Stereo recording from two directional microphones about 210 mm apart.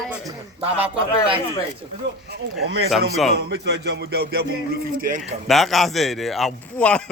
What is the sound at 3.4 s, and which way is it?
Music, 50° right (ahead or behind).